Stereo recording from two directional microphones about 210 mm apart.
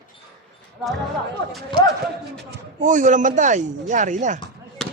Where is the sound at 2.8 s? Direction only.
35° right (ahead or behind).